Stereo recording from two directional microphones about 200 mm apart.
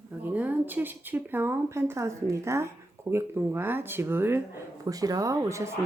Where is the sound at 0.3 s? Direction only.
10° right (ahead or behind).